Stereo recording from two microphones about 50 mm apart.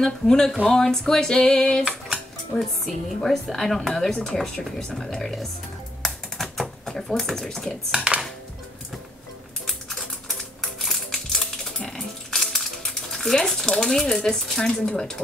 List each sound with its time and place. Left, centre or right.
0.0 s a woman's voice: centre
4.4 s speech: centre
6.0 s typing: centre
7.0 s a woman's voice: centre
8.1 s dishes: centre
9.7 s typewriter: centre
12.3 s a sound: centre
14.9 s a woman's voice: centre